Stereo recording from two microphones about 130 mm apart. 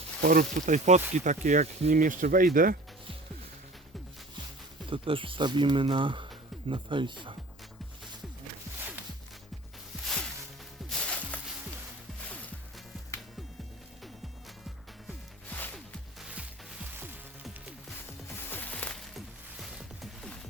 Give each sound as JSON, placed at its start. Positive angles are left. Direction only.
{"t": 0.3, "sound": "speech", "side_deg": -80}
{"t": 4.9, "sound": "speech", "side_deg": -45}
{"t": 10.8, "sound": "music", "side_deg": 5}
{"t": 15.4, "sound": "music", "side_deg": 15}
{"t": 16.2, "sound": "music", "side_deg": -5}
{"t": 18.4, "sound": "music", "side_deg": 15}